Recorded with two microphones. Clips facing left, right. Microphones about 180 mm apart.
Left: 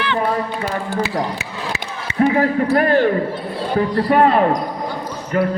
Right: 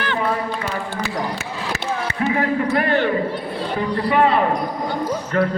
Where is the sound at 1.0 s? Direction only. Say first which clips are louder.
Left 2 dB; 45° right (ahead or behind).